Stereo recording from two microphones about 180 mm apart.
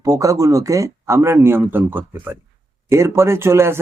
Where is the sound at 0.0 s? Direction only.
20° right (ahead or behind).